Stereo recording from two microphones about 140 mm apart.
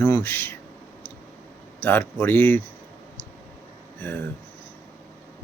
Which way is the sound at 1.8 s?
15° left (ahead or behind).